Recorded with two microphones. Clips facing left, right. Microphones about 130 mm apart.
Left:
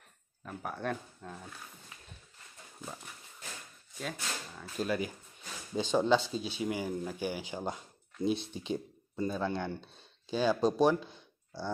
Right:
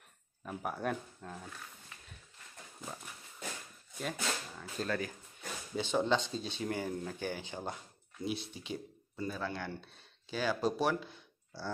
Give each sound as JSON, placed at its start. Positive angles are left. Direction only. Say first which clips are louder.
{"t": 0.5, "sound": "speech", "louder": "even", "side_deg": -5}
{"t": 4.0, "sound": "speech", "louder": "right 2 dB", "side_deg": 0}
{"t": 4.7, "sound": "speech", "louder": "left 3 dB", "side_deg": 15}
{"t": 8.3, "sound": "speech", "louder": "left 6 dB", "side_deg": 25}